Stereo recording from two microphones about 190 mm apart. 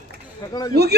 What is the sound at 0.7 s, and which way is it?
Speech, 60° right (ahead or behind).